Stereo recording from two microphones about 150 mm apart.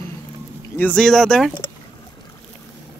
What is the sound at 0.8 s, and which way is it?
Speech, 5° left (ahead or behind).